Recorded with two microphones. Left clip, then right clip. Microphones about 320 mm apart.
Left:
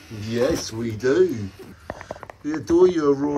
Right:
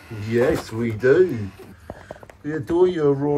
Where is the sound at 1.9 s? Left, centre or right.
Centre.